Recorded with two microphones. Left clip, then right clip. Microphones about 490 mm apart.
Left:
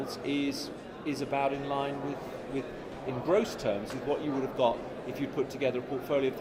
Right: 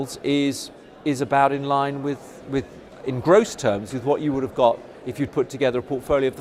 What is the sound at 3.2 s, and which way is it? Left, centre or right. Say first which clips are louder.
Speech: right 11 dB; right.